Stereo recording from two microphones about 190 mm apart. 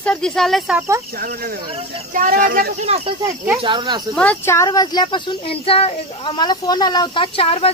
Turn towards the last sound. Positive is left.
turn(degrees=30)  # may be behind; listen again after turning